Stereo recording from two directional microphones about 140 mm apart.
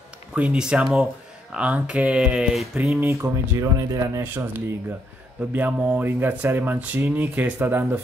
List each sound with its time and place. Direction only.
0.4 s speech: 5° right (ahead or behind)
3.1 s speech: 20° right (ahead or behind)